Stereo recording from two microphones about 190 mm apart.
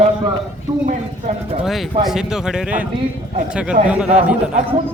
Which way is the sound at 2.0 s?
5° right (ahead or behind).